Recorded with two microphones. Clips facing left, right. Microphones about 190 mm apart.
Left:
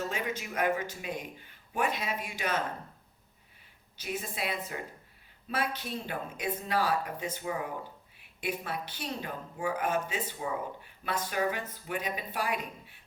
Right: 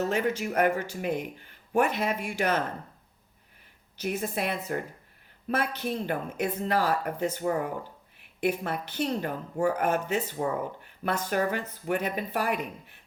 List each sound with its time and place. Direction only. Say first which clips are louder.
0.1 s speech: right 8 dB; 55° right (ahead or behind)
4.2 s speech: right 5 dB; 50° right (ahead or behind)